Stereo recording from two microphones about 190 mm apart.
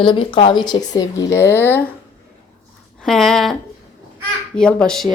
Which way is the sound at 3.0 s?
Centre (ahead or behind).